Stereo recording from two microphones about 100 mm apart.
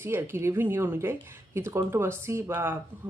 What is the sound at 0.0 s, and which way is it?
Speech, 25° right (ahead or behind).